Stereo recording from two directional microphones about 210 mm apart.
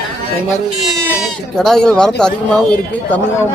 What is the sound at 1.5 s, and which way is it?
Speech, centre (ahead or behind).